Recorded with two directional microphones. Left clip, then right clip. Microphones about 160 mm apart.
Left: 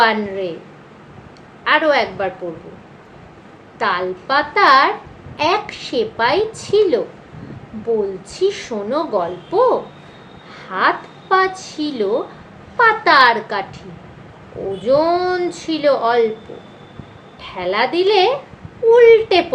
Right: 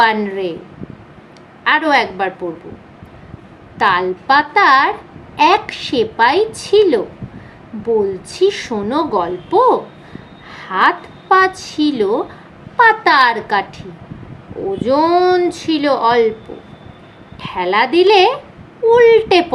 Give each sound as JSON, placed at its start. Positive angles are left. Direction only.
{"t": 0.0, "sound": "a woman's voice", "side_deg": -90}
{"t": 1.6, "sound": "a woman's voice", "side_deg": -90}
{"t": 3.8, "sound": "a woman's voice", "side_deg": -90}
{"t": 8.3, "sound": "a woman's voice", "side_deg": -90}
{"t": 10.5, "sound": "a woman's voice", "side_deg": -90}
{"t": 14.8, "sound": "a woman's voice", "side_deg": -90}
{"t": 17.4, "sound": "a woman's voice", "side_deg": -90}